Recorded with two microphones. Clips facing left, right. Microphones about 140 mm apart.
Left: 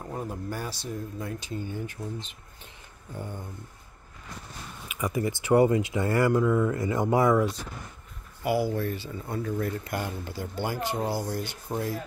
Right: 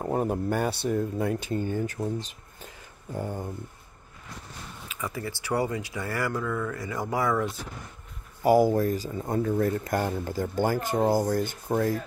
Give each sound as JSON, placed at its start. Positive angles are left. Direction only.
{"t": 0.0, "sound": "speech", "side_deg": -60}
{"t": 3.2, "sound": "speech", "side_deg": -40}
{"t": 4.8, "sound": "speech", "side_deg": 15}
{"t": 8.4, "sound": "speech", "side_deg": -40}